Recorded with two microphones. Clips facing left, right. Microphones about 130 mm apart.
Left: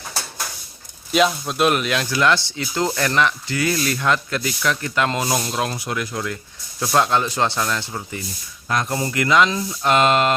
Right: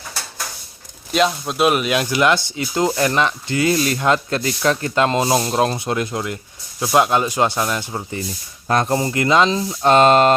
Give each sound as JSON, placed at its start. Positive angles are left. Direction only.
{"t": 1.1, "sound": "speech", "side_deg": 0}
{"t": 8.6, "sound": "speech", "side_deg": -35}